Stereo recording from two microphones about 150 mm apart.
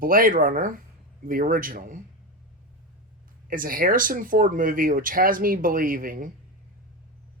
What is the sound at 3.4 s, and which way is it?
Speech, 65° right (ahead or behind).